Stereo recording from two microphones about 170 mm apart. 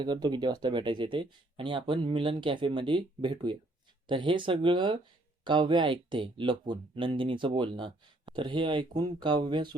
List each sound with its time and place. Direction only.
0.0 s speech: 25° right (ahead or behind)